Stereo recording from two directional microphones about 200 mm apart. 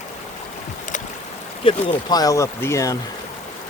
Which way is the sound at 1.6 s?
20° left (ahead or behind).